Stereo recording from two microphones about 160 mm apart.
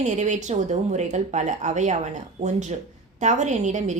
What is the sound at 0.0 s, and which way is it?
A woman's voice, 45° right (ahead or behind).